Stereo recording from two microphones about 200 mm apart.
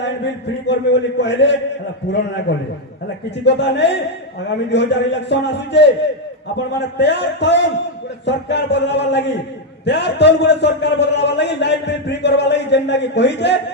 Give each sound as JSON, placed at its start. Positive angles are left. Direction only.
{"t": 0.0, "sound": "a man's voice", "side_deg": 60}